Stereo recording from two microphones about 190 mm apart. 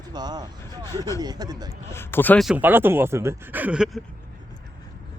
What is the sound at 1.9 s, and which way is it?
Laughter, 15° left (ahead or behind).